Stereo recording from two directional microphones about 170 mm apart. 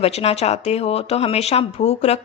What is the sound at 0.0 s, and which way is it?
A woman's voice, 35° left (ahead or behind).